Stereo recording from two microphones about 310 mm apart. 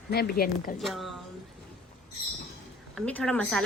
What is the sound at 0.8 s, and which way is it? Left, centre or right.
Speech, centre.